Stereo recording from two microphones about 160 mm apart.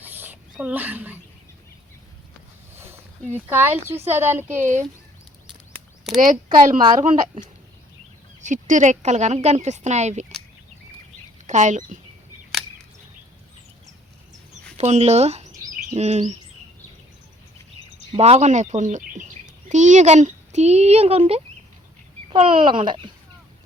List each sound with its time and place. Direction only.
0.0 s a sound: 10° right (ahead or behind)
3.3 s speech: 10° right (ahead or behind)
6.1 s speech: 55° right (ahead or behind)
8.4 s speech: 50° right (ahead or behind)
11.4 s speech: 50° right (ahead or behind)
14.8 s speech: 40° right (ahead or behind)
18.2 s speech: 45° right (ahead or behind)